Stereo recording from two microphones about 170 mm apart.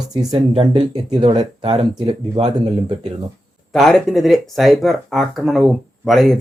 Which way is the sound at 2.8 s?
25° right (ahead or behind).